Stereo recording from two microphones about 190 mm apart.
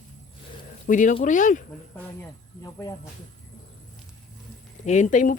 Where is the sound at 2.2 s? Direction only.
20° left (ahead or behind).